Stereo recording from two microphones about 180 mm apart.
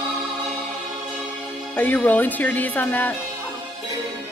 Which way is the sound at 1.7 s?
10° left (ahead or behind).